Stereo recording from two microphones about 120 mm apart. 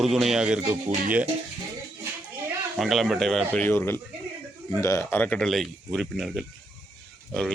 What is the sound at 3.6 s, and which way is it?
Speech, 20° left (ahead or behind).